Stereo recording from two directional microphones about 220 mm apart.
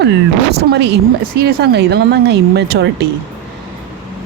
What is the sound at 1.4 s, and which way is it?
Speech, 45° right (ahead or behind).